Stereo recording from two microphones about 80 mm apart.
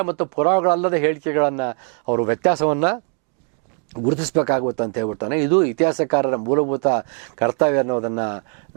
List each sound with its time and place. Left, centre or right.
0.0 s speech: centre
4.2 s speech: centre